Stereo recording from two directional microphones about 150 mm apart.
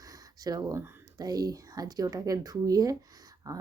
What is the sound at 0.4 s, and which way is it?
Speech, 25° right (ahead or behind).